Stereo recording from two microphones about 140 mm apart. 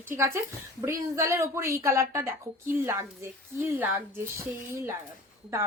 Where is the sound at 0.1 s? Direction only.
20° right (ahead or behind).